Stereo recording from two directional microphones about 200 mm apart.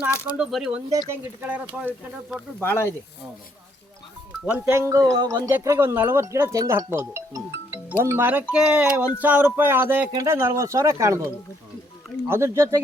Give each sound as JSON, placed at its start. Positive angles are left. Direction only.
{"t": 0.0, "sound": "speech", "side_deg": -5}
{"t": 2.6, "sound": "speech", "side_deg": 10}
{"t": 4.4, "sound": "speech", "side_deg": -5}
{"t": 12.3, "sound": "speech", "side_deg": -15}